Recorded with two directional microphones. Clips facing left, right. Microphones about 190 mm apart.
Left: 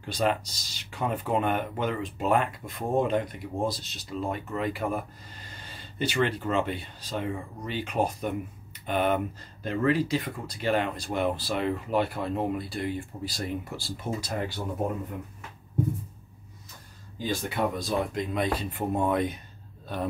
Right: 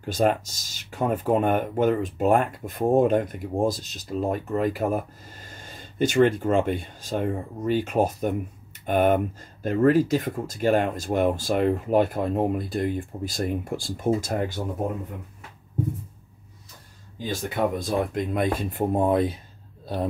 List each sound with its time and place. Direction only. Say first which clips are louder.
0.0 s speech: right 5 dB; 45° right (ahead or behind)
17.7 s speech: right 3 dB; 55° right (ahead or behind); by 19.4 s 30° right (ahead or behind)